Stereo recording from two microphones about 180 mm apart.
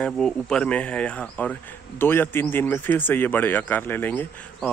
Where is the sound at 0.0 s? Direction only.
5° left (ahead or behind).